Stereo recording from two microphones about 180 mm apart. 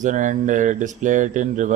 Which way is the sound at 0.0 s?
45° right (ahead or behind).